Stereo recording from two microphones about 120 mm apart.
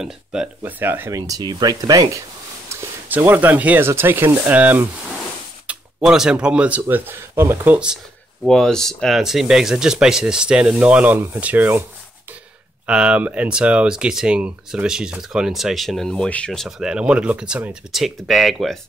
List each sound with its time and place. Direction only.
0.0 s speech: 5° right (ahead or behind)
1.1 s speech: 30° right (ahead or behind); by 8.0 s 10° right (ahead or behind)
8.5 s speech: 5° left (ahead or behind); by 11.8 s 15° right (ahead or behind)
12.8 s speech: 10° right (ahead or behind); by 16.6 s 10° left (ahead or behind)
16.6 s speech: 5° right (ahead or behind)